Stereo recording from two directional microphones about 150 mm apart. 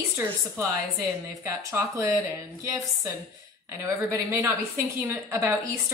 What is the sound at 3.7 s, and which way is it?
A woman's voice, 15° right (ahead or behind).